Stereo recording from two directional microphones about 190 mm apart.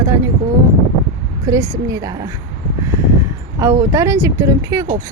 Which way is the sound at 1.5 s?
15° right (ahead or behind).